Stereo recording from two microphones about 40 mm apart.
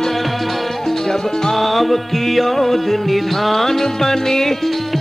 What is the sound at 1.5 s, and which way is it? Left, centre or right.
Music, centre.